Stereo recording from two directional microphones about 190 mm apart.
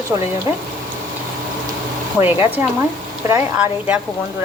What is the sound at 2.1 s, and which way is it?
Speech, 10° right (ahead or behind).